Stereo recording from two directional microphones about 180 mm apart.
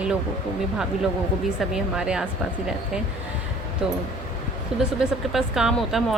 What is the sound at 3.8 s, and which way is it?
Speech, 5° right (ahead or behind).